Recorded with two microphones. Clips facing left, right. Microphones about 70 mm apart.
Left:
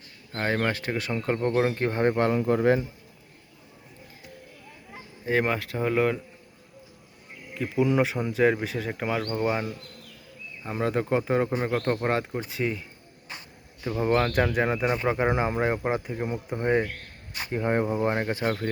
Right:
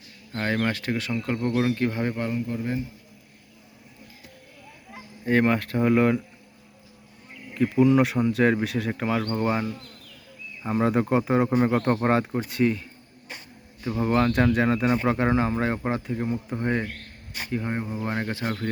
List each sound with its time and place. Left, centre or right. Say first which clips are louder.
0.3 s speech: even; left
2.1 s speech: left 5 dB; left
4.9 s speech: right 3 dB; centre
7.5 s speech: right 5 dB; centre
10.7 s speech: right 3 dB; centre
13.8 s speech: right 1 dB; centre
17.5 s speech: left 4 dB; left